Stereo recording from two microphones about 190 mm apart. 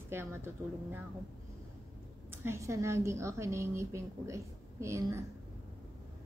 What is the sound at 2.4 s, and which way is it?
A woman's voice, 15° right (ahead or behind).